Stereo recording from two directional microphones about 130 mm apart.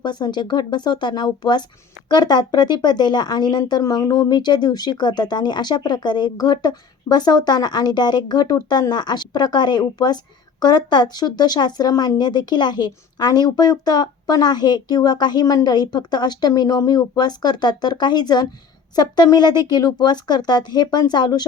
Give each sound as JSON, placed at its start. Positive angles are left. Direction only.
{"t": 0.0, "sound": "speech", "side_deg": 35}